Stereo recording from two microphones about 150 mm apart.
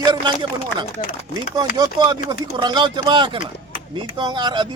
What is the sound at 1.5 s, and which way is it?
Speech, 25° right (ahead or behind).